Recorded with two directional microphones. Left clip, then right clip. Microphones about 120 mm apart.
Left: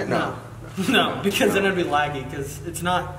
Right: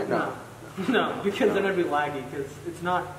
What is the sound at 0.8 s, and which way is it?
A man's voice, 20° left (ahead or behind).